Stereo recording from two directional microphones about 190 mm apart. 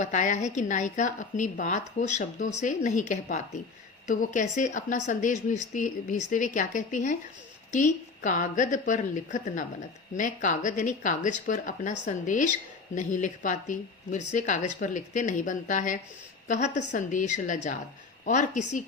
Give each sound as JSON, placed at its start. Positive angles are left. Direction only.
{"t": 0.0, "sound": "a woman's voice", "side_deg": 40}